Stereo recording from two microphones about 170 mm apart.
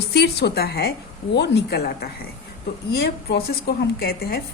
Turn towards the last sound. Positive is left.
turn(degrees=65)  # may be behind; listen again after turning